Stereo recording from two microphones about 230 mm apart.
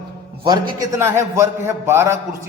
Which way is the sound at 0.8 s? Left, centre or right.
Centre.